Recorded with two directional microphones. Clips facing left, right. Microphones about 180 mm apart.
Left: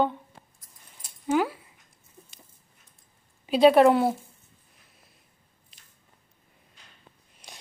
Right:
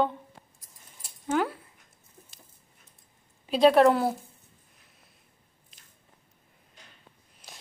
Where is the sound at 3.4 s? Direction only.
Centre (ahead or behind).